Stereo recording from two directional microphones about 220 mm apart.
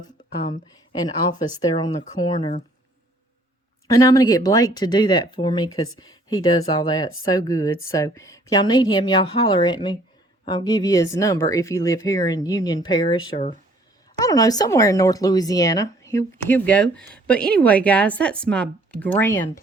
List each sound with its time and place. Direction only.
1.0 s a woman's voice: 15° left (ahead or behind)
3.8 s a woman's voice: 15° left (ahead or behind)
13.3 s speech: 30° left (ahead or behind)
14.2 s a woman's voice: 15° left (ahead or behind)